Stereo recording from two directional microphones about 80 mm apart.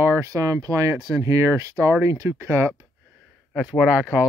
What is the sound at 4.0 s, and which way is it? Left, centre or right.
Speech, centre.